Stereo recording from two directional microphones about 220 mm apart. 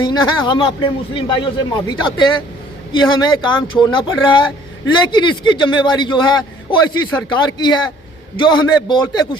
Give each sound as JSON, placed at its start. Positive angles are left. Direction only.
{"t": 0.0, "sound": "speech", "side_deg": 20}